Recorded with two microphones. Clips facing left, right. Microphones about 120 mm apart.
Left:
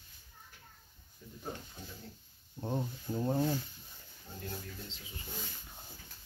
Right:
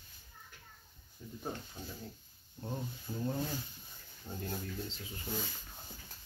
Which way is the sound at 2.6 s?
25° left (ahead or behind).